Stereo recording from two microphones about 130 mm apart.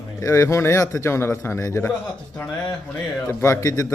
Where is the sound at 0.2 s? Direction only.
25° left (ahead or behind).